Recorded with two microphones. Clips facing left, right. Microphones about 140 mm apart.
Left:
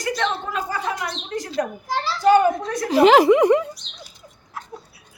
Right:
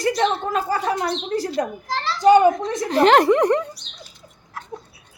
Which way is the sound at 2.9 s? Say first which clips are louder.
Left 2 dB; 5° left (ahead or behind).